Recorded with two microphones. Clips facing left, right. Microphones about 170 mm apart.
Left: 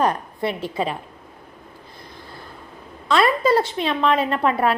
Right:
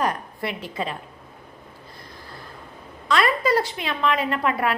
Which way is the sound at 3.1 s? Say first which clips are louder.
Left 3 dB; 30° left (ahead or behind).